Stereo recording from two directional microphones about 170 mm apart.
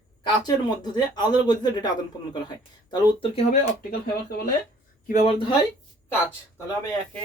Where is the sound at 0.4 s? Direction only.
25° left (ahead or behind).